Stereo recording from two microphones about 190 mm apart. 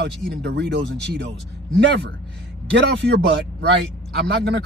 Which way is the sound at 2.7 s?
65° right (ahead or behind).